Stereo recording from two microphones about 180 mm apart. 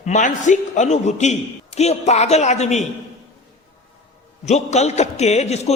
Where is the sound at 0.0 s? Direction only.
45° left (ahead or behind).